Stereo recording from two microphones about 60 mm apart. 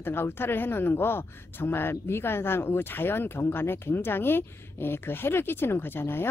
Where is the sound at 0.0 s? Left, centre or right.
Left.